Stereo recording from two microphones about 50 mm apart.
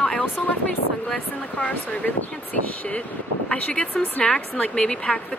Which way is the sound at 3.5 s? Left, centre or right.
Centre.